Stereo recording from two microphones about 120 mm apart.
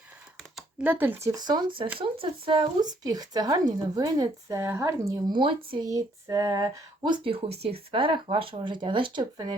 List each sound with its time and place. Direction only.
0.8 s speech: 15° right (ahead or behind)
1.3 s speech: 35° right (ahead or behind)
5.3 s speech: 45° right (ahead or behind)
5.8 s a sound: 30° right (ahead or behind)
7.1 s speech: 55° right (ahead or behind)